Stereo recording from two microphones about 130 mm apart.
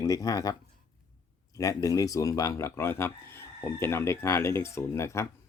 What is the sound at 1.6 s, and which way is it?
Speech, 25° left (ahead or behind).